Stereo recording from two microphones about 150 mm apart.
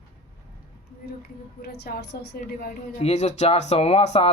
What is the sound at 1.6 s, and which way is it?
Speech, 90° left.